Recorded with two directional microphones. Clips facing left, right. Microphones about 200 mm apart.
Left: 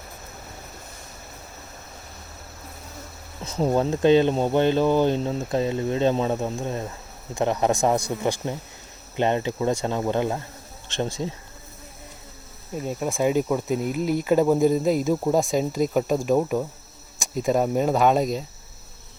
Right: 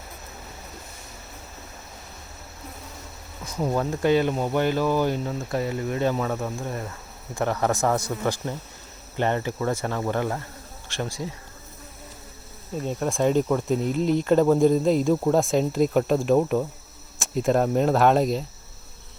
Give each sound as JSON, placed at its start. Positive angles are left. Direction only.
{"t": 3.4, "sound": "speech", "side_deg": 25}
{"t": 12.7, "sound": "speech", "side_deg": 5}